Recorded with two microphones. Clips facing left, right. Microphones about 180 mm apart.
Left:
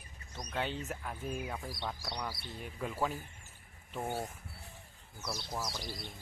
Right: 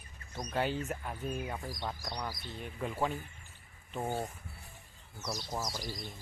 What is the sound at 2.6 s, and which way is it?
Speech, centre (ahead or behind).